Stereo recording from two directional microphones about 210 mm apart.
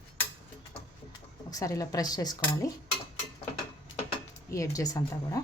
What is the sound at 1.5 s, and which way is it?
Speech, 15° left (ahead or behind).